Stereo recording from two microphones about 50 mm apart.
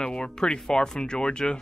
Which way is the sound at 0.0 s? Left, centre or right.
Centre.